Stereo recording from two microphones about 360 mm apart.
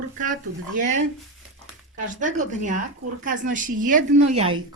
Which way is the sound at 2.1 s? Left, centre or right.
Right.